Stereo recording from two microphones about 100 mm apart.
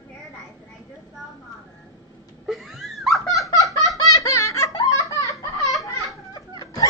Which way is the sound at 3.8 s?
35° left (ahead or behind).